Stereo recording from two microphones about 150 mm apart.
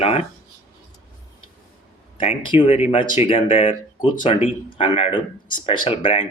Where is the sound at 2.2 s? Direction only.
35° left (ahead or behind).